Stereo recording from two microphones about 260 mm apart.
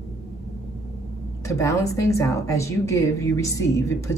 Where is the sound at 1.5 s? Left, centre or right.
Centre.